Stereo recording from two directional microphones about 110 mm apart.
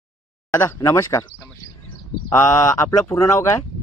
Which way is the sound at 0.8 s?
30° left (ahead or behind).